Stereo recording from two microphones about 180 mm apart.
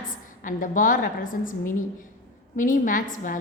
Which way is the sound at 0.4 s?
50° left (ahead or behind).